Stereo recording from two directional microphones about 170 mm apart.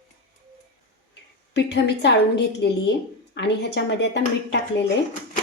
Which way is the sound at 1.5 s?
90° left.